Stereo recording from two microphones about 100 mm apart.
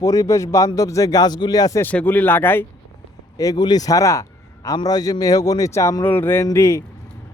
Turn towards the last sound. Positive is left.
turn(degrees=30)  # may be behind; listen again after turning